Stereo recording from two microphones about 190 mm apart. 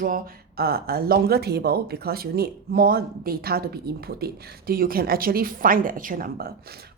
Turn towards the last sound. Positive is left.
turn(degrees=-50)  # may be behind; listen again after turning